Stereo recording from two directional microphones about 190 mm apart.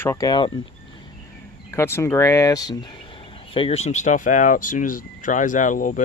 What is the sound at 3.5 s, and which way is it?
Speech, 30° left (ahead or behind).